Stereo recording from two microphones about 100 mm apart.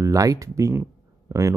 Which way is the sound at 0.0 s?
35° right (ahead or behind).